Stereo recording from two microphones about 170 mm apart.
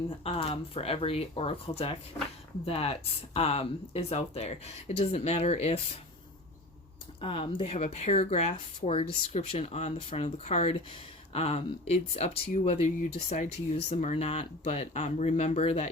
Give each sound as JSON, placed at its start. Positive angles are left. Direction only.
{"t": 0.3, "sound": "speech", "side_deg": 35}
{"t": 7.2, "sound": "speech", "side_deg": 30}